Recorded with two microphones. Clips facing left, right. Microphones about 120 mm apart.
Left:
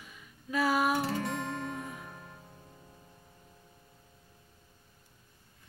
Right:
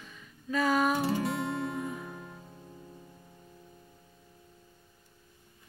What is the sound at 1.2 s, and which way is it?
Music, 10° right (ahead or behind).